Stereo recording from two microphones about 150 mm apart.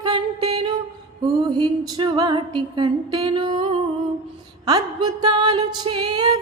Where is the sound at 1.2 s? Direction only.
30° right (ahead or behind).